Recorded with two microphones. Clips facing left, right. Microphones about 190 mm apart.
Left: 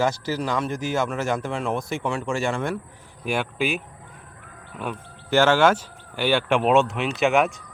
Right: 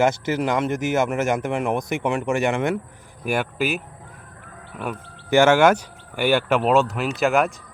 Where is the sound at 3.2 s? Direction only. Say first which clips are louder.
Right 2 dB; 5° right (ahead or behind).